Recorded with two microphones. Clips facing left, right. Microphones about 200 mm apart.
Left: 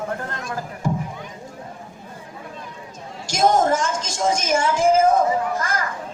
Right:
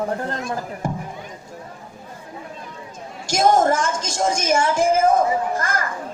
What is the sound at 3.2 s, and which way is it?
A woman's voice, 50° right (ahead or behind).